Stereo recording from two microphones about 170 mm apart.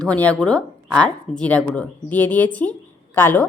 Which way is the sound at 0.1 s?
5° left (ahead or behind).